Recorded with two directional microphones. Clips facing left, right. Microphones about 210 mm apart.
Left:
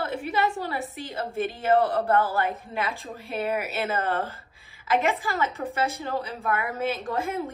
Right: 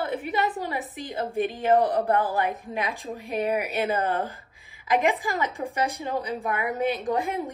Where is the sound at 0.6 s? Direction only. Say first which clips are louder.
Even; 15° right (ahead or behind).